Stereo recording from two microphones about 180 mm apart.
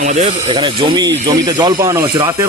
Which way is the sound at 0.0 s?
40° right (ahead or behind).